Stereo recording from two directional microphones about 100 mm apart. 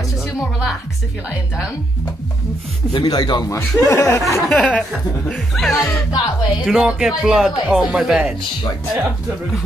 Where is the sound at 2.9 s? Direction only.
50° left (ahead or behind).